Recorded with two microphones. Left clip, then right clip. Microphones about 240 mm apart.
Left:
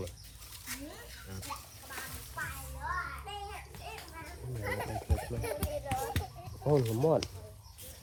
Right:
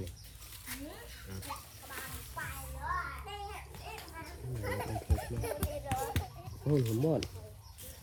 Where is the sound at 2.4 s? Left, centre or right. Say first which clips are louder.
Left 2 dB; right.